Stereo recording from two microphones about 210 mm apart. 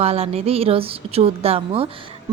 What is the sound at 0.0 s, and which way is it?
A woman's voice, 30° right (ahead or behind).